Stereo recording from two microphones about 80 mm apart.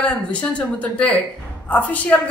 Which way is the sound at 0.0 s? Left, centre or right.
Centre.